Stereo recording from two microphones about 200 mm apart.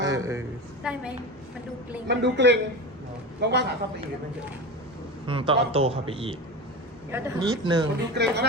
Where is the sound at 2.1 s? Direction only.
60° right (ahead or behind).